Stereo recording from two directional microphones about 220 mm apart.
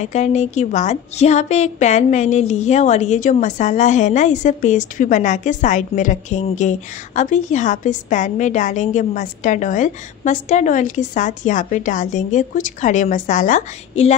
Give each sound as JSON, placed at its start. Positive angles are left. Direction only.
{"t": 0.0, "sound": "a woman's voice", "side_deg": 30}